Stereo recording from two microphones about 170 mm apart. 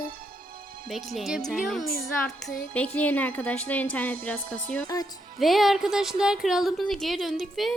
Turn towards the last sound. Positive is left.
turn(degrees=0)  # may be behind; listen again after turning